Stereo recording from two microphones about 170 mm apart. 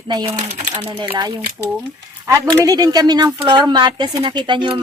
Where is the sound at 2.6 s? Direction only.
20° right (ahead or behind).